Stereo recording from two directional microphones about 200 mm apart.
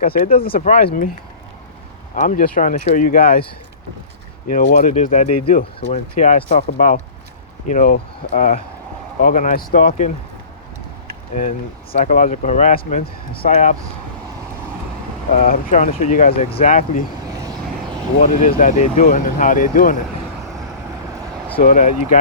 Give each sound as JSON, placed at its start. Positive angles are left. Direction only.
{"t": 0.0, "sound": "speech", "side_deg": 45}
{"t": 2.1, "sound": "speech", "side_deg": 40}
{"t": 4.5, "sound": "speech", "side_deg": 40}
{"t": 11.3, "sound": "speech", "side_deg": 40}
{"t": 15.4, "sound": "speech", "side_deg": 40}
{"t": 18.2, "sound": "speech", "side_deg": 40}
{"t": 21.6, "sound": "speech", "side_deg": 40}